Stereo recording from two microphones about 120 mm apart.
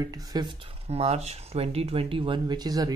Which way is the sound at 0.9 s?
60° right (ahead or behind).